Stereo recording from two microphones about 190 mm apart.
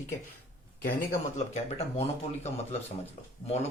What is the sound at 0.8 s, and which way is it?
Speech, 50° left (ahead or behind).